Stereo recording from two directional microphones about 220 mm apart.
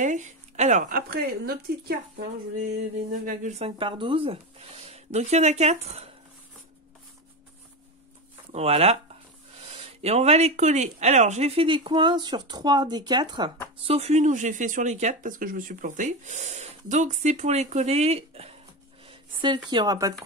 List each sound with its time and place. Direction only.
0.0 s speech: 35° right (ahead or behind)
3.1 s speech: 35° right (ahead or behind)
8.5 s speech: 30° right (ahead or behind)
19.0 s a sound: 20° right (ahead or behind)
19.7 s speech: 20° right (ahead or behind)